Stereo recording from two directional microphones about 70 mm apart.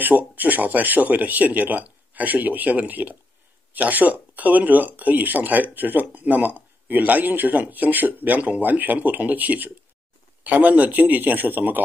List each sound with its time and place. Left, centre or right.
0.0 s speech: right